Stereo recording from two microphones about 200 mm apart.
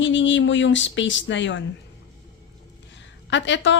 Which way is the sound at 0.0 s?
65° left (ahead or behind).